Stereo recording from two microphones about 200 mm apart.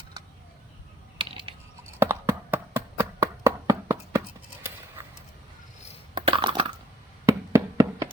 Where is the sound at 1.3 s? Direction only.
25° right (ahead or behind).